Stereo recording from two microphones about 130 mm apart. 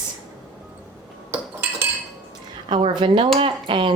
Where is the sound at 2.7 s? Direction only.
35° right (ahead or behind).